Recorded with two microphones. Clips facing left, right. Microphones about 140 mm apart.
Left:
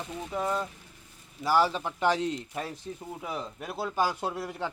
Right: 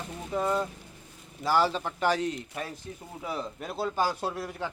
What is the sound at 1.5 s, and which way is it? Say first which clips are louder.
A man's voice: even; 15° left (ahead or behind).